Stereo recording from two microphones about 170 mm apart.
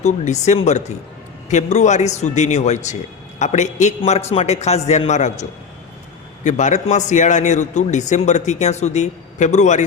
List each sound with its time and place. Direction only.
0.0 s a man's voice: 40° left (ahead or behind)